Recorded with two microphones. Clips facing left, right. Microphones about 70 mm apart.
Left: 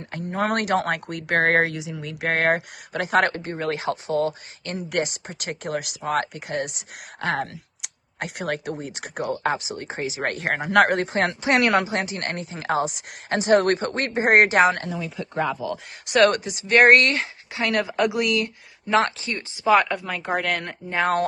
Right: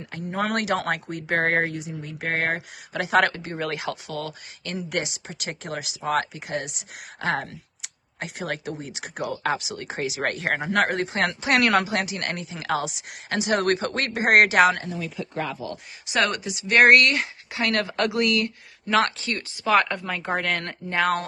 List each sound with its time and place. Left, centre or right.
0.0 s speech: left
1.1 s speech: left
1.7 s speech: left
2.9 s speech: left
3.6 s speech: left
5.0 s speech: left
10.3 s speech: left
11.2 s speech: left
16.3 s speech: left
17.7 s speech: centre
19.6 s speech: centre
20.1 s speech: centre
21.0 s speech: left